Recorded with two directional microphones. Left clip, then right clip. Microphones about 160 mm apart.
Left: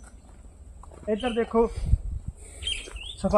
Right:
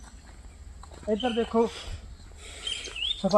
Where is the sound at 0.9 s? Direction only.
Centre (ahead or behind).